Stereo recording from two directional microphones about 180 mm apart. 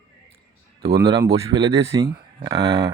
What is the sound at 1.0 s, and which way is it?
Speech, 25° right (ahead or behind).